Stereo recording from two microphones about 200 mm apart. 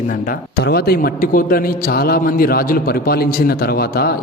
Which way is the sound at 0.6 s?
50° left (ahead or behind).